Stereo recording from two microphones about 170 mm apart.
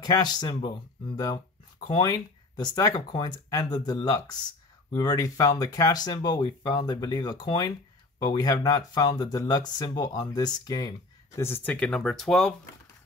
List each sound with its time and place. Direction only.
0.0 s speech: 25° left (ahead or behind); by 12.5 s 5° left (ahead or behind)